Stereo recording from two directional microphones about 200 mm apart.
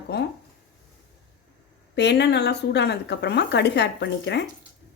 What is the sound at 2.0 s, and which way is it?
A woman's voice, 60° left (ahead or behind).